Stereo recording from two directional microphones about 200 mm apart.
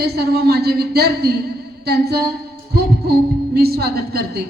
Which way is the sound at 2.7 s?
50° right (ahead or behind).